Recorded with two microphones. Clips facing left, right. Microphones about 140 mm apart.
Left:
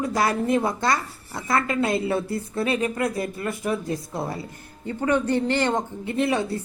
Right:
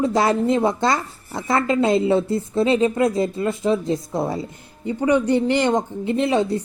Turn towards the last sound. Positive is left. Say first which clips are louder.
# right 4 dB
turn(degrees=-20)  # may be behind; listen again after turning